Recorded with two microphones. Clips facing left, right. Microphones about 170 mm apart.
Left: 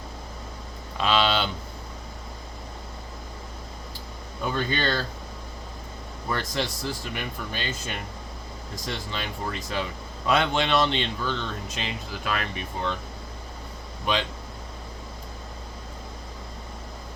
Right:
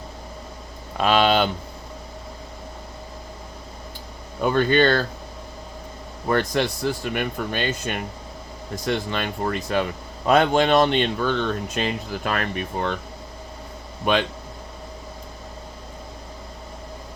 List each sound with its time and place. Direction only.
0.9 s a sound: 50° right (ahead or behind)
4.4 s speech: 60° right (ahead or behind)
6.2 s speech: 60° right (ahead or behind)
10.2 s speech: 45° right (ahead or behind)
14.0 s speech: 55° right (ahead or behind)